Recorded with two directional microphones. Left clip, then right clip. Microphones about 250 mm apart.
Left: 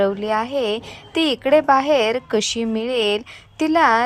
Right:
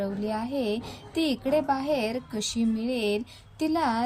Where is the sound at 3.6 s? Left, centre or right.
Left.